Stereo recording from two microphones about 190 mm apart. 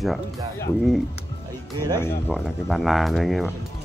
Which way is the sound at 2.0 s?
10° left (ahead or behind).